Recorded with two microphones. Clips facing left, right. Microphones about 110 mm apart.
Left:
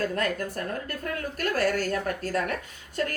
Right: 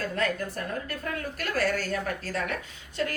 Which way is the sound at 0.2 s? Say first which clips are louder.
Left 1 dB; 45° left (ahead or behind).